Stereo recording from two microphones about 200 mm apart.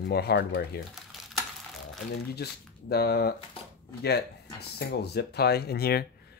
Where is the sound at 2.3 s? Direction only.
55° left (ahead or behind).